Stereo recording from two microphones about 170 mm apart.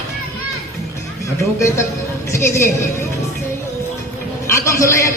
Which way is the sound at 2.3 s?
15° left (ahead or behind).